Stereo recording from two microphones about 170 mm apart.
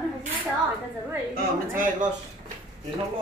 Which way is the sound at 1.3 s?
55° right (ahead or behind).